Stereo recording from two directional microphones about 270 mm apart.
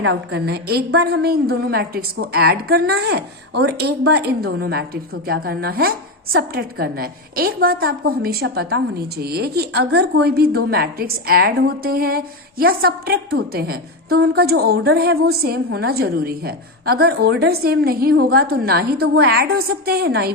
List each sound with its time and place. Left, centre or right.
0.0 s a woman's voice: right